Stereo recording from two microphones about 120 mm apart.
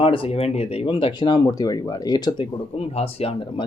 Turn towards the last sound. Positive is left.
turn(degrees=50)  # may be behind; listen again after turning